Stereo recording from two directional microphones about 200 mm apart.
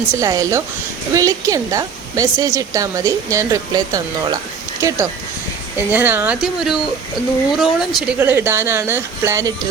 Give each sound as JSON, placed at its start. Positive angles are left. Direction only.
{"t": 0.2, "sound": "a woman's voice", "side_deg": -15}